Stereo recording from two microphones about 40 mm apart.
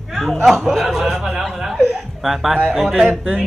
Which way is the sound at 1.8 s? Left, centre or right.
Centre.